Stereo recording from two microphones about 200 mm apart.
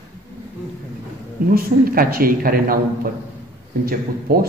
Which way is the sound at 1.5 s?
45° right (ahead or behind).